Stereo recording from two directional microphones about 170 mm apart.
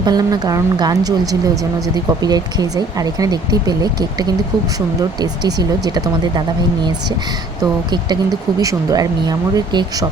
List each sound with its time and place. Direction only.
0.0 s speech: 25° right (ahead or behind)
7.6 s speech: 25° right (ahead or behind)